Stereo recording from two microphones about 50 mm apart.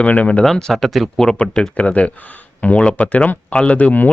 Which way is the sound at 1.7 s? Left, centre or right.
Left.